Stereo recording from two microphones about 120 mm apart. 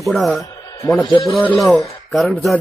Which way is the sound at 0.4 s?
25° left (ahead or behind).